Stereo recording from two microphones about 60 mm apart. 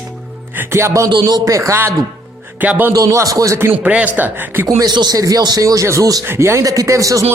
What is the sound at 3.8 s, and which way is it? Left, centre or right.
Speech, centre.